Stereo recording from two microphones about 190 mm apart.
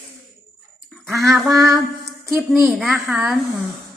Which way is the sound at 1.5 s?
15° right (ahead or behind).